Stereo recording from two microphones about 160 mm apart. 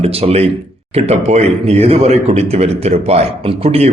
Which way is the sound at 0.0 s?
40° right (ahead or behind).